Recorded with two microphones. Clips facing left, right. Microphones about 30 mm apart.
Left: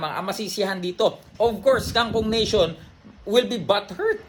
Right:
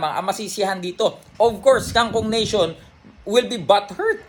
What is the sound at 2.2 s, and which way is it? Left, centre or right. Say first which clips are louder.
Speech: right 1 dB; left.